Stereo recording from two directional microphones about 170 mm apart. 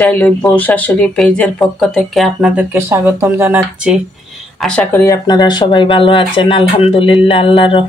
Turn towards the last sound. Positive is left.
turn(degrees=30)  # may be behind; listen again after turning